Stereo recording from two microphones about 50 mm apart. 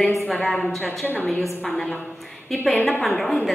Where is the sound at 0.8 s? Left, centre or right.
Left.